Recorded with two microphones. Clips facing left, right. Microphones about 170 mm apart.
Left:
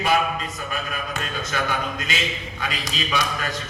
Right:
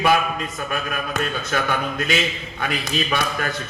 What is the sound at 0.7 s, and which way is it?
A man's voice, 55° right (ahead or behind).